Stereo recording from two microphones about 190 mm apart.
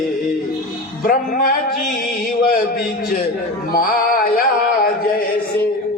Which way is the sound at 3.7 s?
50° left (ahead or behind).